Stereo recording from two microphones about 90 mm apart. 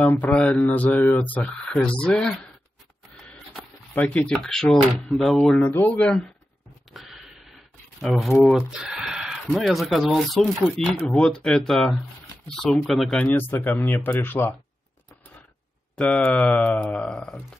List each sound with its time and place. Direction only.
0.0 s speech: 20° left (ahead or behind)
3.9 s speech: 20° left (ahead or behind)
4.3 s speech: 5° left (ahead or behind)
5.8 s speech: 25° left (ahead or behind)
6.9 s a sound: centre (ahead or behind)
8.0 s speech: centre (ahead or behind)
8.5 s a sound: 5° right (ahead or behind)
9.5 s speech: centre (ahead or behind)
13.2 s speech: 20° left (ahead or behind)
16.0 s speech: 10° left (ahead or behind)